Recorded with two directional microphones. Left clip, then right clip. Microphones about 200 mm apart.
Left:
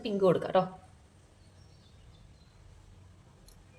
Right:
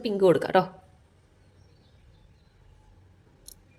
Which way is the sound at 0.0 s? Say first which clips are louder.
Right 5 dB; 50° right (ahead or behind).